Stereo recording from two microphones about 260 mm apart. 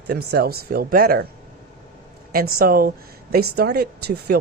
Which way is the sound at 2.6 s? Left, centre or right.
Right.